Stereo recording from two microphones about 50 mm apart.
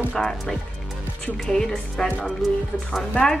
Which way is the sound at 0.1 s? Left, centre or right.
Centre.